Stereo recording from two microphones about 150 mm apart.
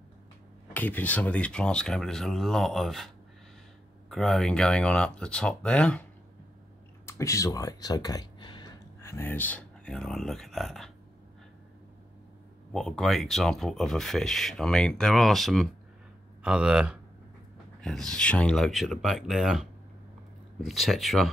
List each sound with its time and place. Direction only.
0.7 s speech: 10° left (ahead or behind)
4.1 s speech: centre (ahead or behind)
7.1 s speech: 20° left (ahead or behind)
9.0 s speech: 15° left (ahead or behind)
12.7 s speech: 5° left (ahead or behind)